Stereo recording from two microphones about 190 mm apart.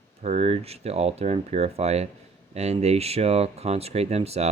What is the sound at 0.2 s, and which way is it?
Speech, 35° right (ahead or behind).